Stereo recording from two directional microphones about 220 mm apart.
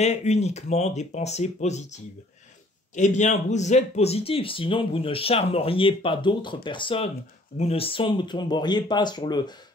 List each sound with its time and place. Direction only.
0.0 s speech: 30° left (ahead or behind)